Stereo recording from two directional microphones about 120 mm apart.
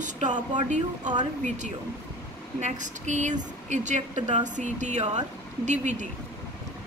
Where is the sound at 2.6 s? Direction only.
90° right.